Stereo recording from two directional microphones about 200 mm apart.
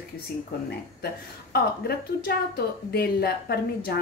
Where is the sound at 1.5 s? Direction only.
50° left (ahead or behind).